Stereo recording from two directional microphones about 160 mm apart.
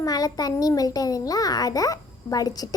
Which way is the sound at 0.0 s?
25° left (ahead or behind).